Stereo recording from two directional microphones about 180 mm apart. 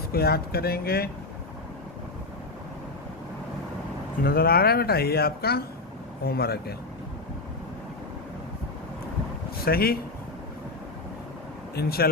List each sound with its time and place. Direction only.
0.1 s speech: 60° left (ahead or behind)
4.2 s speech: 55° left (ahead or behind)
9.6 s speech: 55° left (ahead or behind)
11.7 s speech: 60° left (ahead or behind)